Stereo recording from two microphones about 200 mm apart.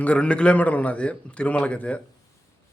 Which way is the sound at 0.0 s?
5° left (ahead or behind).